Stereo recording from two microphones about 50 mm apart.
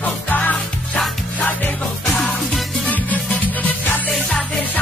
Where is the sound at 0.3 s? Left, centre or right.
Left.